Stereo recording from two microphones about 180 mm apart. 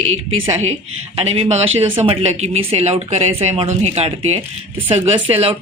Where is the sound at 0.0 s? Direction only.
90° right.